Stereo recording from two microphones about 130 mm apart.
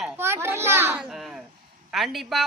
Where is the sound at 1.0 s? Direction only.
Centre (ahead or behind).